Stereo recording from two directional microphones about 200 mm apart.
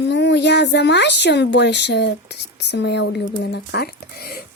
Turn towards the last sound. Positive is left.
turn(degrees=45)  # may be behind; listen again after turning